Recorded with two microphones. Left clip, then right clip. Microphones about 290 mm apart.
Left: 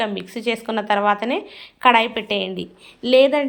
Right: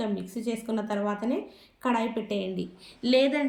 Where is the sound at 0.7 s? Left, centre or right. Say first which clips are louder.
Left 6 dB; left.